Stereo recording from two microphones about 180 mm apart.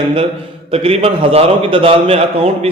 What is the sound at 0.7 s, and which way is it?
A man's voice, 30° right (ahead or behind).